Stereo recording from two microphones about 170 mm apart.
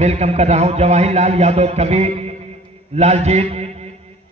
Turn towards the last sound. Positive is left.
turn(degrees=-40)  # may be behind; listen again after turning